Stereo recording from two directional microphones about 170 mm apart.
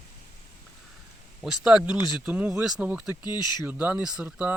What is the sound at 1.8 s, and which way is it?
Speech, 25° left (ahead or behind).